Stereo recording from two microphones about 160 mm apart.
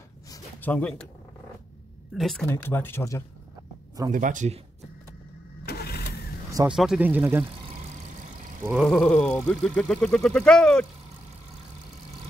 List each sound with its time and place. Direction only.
0.6 s speech: 10° left (ahead or behind)
2.1 s speech: centre (ahead or behind)
2.4 s speech: 15° left (ahead or behind)
4.1 s speech: 55° right (ahead or behind)
5.7 s vehicle: 80° left
6.7 s speech: 5° right (ahead or behind)
8.6 s speech: 5° right (ahead or behind)